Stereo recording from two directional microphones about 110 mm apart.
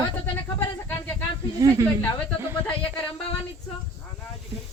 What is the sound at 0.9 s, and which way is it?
Speech, 20° left (ahead or behind).